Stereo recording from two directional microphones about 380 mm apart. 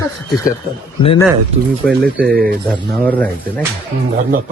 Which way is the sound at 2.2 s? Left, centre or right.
Right.